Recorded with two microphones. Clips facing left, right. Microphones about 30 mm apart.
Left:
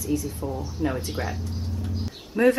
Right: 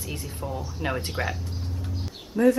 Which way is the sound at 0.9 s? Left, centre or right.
Right.